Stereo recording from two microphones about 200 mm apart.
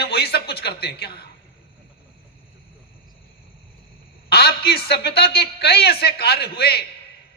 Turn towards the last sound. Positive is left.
turn(degrees=55)  # may be behind; listen again after turning